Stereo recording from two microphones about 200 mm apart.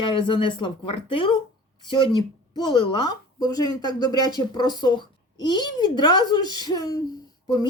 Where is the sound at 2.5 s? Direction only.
25° left (ahead or behind).